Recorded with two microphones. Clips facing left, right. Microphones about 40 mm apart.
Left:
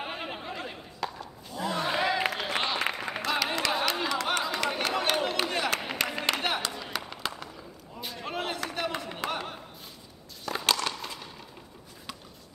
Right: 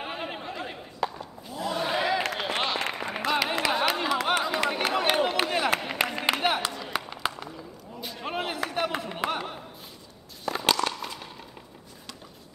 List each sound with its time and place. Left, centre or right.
0.0 s bleat: centre
1.6 s a sound: centre
10.4 s crushing: centre